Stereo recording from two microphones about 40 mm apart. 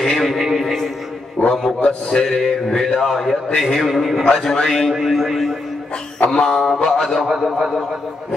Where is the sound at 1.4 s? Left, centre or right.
Left.